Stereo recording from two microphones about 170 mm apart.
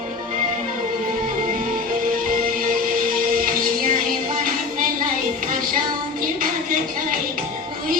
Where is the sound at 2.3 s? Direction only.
55° right (ahead or behind).